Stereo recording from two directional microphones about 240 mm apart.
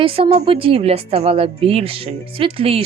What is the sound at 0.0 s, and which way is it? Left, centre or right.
Speech, right.